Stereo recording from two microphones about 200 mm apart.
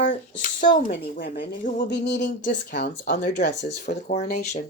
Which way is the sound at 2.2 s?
40° left (ahead or behind).